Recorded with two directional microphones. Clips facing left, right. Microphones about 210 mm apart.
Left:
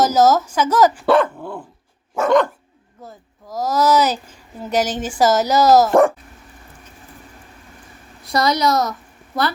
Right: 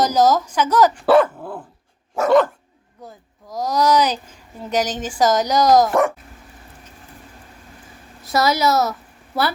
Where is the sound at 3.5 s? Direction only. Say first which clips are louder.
Left 1 dB; 5° left (ahead or behind).